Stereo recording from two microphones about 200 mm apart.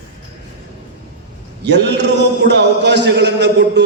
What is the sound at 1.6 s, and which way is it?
A man's voice, 60° right (ahead or behind).